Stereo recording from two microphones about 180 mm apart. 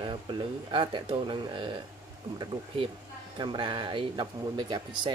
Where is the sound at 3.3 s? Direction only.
25° right (ahead or behind).